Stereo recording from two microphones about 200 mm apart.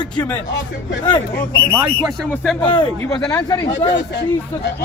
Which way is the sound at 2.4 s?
5° left (ahead or behind).